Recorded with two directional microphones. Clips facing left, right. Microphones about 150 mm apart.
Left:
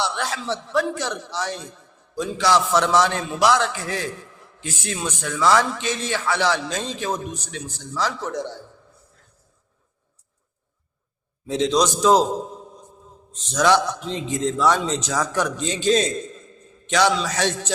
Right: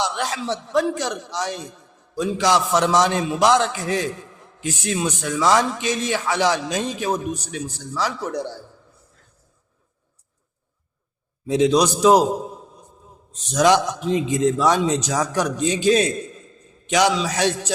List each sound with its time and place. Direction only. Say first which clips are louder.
0.0 s a man's voice: right 2 dB; 15° right (ahead or behind)
11.4 s a man's voice: right 3 dB; 10° right (ahead or behind)